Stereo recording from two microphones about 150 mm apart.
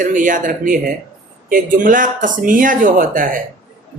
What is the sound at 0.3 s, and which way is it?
Speech, 65° right (ahead or behind).